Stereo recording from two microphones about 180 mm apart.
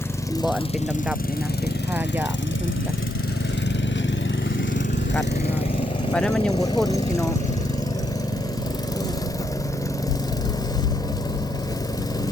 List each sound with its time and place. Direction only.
6.1 s speech: 5° left (ahead or behind)
6.6 s speech: 20° left (ahead or behind)